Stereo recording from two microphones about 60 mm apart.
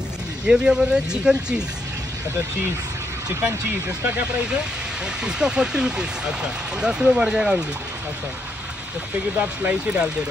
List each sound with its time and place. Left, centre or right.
0.5 s speech: centre
5.2 s speech: centre
9.4 s speech: right